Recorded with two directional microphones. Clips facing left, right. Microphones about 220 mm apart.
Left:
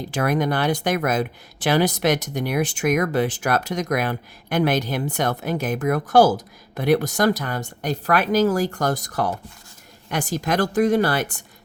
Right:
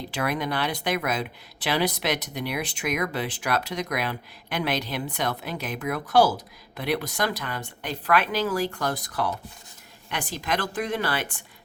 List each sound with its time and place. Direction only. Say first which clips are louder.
0.1 s speech: left 6 dB; 45° left (ahead or behind)